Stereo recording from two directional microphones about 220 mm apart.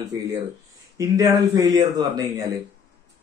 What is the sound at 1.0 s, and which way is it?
A man's voice, 15° right (ahead or behind).